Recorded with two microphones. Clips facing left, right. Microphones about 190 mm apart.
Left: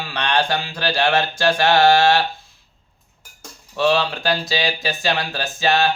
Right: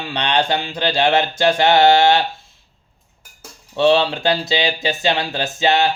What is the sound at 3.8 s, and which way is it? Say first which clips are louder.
Speech: right 4 dB; 25° right (ahead or behind).